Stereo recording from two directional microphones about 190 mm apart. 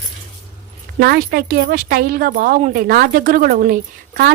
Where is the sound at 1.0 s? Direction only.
55° right (ahead or behind).